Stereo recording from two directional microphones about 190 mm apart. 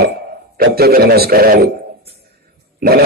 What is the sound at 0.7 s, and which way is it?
A man's voice, 55° right (ahead or behind).